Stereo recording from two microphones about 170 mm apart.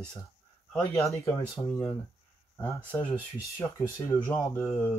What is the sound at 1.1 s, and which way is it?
Speech, 15° left (ahead or behind).